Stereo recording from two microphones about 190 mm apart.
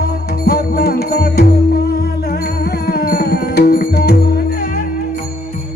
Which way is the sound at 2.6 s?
55° left (ahead or behind).